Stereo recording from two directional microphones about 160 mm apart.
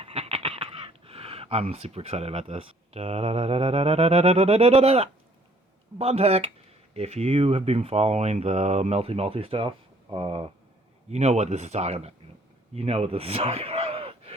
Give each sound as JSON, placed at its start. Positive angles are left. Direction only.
{"t": 0.0, "sound": "speech", "side_deg": -40}
{"t": 11.1, "sound": "speech", "side_deg": -45}
{"t": 12.7, "sound": "a sound", "side_deg": -40}